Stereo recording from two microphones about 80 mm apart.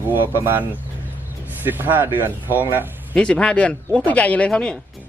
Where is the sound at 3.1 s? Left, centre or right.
Centre.